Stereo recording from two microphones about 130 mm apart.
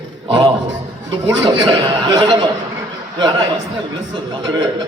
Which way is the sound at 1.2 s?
35° right (ahead or behind).